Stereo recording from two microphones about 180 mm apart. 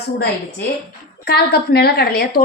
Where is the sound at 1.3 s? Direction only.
60° left (ahead or behind).